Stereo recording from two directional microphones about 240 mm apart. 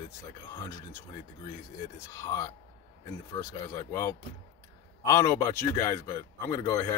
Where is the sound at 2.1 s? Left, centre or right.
Centre.